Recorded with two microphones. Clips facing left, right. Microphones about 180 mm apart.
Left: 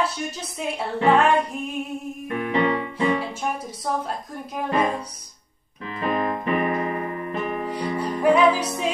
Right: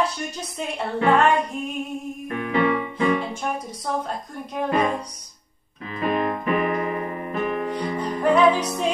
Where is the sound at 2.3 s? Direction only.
30° left (ahead or behind).